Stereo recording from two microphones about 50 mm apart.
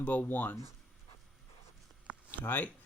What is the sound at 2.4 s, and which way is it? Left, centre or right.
Speech, left.